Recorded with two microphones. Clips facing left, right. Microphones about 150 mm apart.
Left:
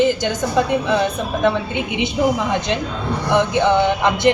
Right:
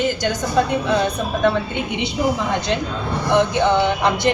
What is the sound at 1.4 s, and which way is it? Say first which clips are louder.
Speech: left 1 dB; 15° left (ahead or behind).